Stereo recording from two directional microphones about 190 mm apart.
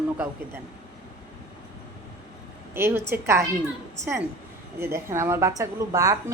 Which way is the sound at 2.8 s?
15° right (ahead or behind).